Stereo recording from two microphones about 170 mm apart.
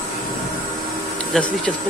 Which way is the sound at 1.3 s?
5° left (ahead or behind).